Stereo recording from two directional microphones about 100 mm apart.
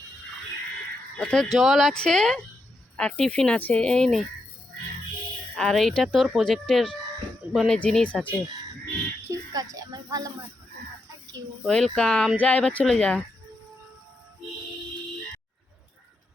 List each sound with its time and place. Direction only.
1.2 s speech: 5° left (ahead or behind)
5.5 s speech: 5° left (ahead or behind)
9.3 s speech: 35° right (ahead or behind)
11.6 s speech: 5° left (ahead or behind)